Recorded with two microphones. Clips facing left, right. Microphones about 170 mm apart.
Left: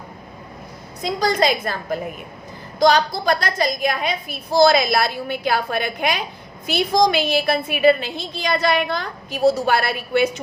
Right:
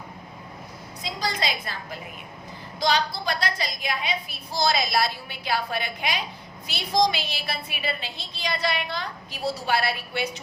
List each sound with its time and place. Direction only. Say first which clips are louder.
1.0 s a woman's voice: left 10 dB; 50° left (ahead or behind)